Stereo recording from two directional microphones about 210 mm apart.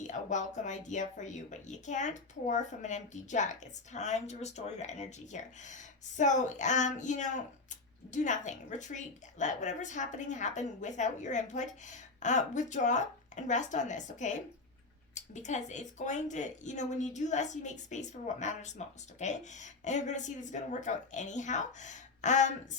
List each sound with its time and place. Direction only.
0.1 s a woman's voice: 35° left (ahead or behind)